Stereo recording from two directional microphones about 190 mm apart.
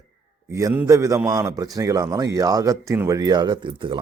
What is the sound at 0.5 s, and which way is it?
A man's voice, 15° right (ahead or behind).